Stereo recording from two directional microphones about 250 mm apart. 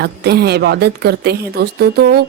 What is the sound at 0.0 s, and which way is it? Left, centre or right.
A woman's voice, right.